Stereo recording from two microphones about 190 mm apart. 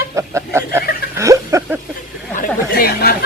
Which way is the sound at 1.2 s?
15° right (ahead or behind).